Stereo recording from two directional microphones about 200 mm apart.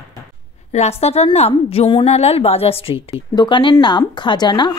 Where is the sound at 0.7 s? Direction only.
35° left (ahead or behind).